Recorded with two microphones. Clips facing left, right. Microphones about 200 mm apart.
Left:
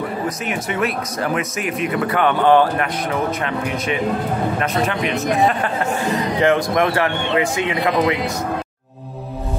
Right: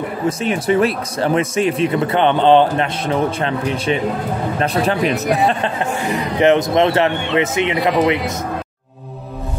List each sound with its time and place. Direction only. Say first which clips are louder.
0.4 s speech: right 10 dB; 30° right (ahead or behind)
6.0 s speech: right 3 dB; 15° right (ahead or behind)